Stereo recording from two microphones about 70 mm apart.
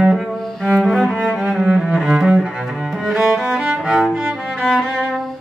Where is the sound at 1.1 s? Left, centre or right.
Centre.